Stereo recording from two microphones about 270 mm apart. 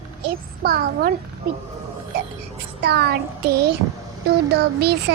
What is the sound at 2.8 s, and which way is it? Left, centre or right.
Child singing, right.